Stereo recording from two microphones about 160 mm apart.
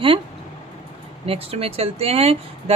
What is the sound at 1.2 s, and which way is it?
Speech, 35° right (ahead or behind).